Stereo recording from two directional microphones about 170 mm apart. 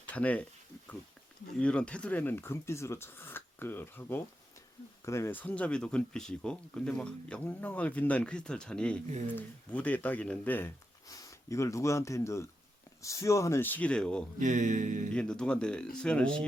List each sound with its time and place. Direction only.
0.1 s speech: 10° left (ahead or behind)
1.5 s speech: 5° left (ahead or behind)
14.3 s music: 45° right (ahead or behind)
15.1 s speech: 5° left (ahead or behind)